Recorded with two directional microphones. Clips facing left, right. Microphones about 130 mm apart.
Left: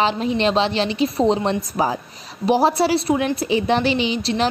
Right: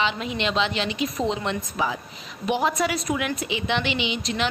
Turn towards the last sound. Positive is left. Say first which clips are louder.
# left 6 dB
turn(degrees=35)  # may be behind; listen again after turning